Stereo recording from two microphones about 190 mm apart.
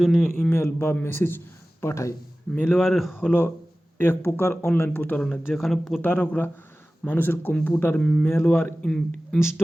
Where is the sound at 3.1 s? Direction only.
10° left (ahead or behind).